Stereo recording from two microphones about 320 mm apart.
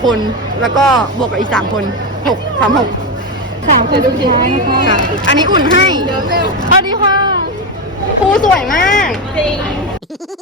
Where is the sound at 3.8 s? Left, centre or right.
Right.